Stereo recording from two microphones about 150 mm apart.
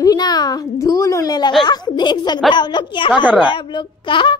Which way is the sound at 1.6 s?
30° left (ahead or behind).